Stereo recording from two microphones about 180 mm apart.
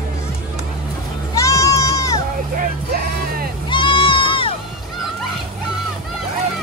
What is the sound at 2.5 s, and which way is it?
Music, 55° right (ahead or behind).